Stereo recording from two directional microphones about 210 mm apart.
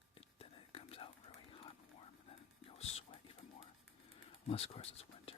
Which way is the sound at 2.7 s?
30° left (ahead or behind).